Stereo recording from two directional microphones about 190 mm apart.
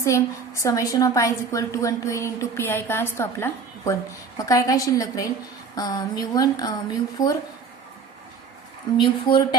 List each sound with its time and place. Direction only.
0.0 s a woman's voice: 15° left (ahead or behind)
9.0 s speech: 25° left (ahead or behind)